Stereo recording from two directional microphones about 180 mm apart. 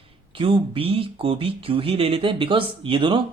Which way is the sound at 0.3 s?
30° right (ahead or behind).